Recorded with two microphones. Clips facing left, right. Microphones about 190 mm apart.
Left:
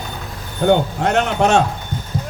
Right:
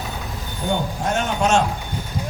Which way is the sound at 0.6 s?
65° left (ahead or behind).